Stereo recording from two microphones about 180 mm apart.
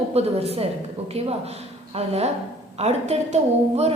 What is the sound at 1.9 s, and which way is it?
A woman's voice, 35° right (ahead or behind).